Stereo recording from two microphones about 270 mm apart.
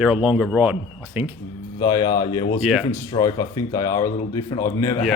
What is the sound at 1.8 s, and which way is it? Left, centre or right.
Speech, centre.